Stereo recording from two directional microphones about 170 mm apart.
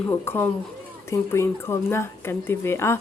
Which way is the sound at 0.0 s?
15° left (ahead or behind).